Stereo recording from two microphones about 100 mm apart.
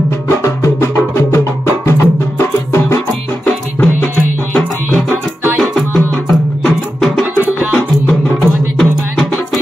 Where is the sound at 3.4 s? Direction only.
15° left (ahead or behind).